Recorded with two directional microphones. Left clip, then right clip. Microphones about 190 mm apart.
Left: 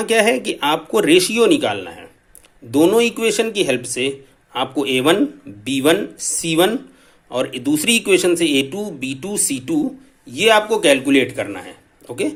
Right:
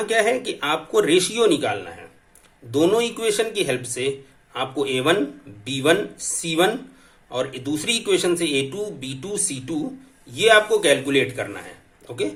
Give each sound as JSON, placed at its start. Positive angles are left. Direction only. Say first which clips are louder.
{"t": 0.0, "sound": "speech", "louder": "left 4 dB", "side_deg": 30}